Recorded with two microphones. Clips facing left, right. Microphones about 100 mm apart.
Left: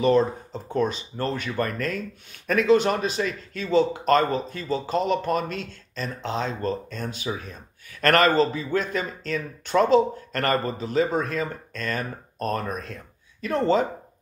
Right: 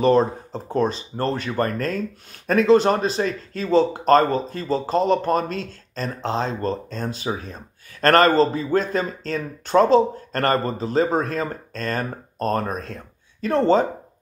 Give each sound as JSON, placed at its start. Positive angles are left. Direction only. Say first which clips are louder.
{"t": 0.0, "sound": "speech", "louder": "right 3 dB", "side_deg": -35}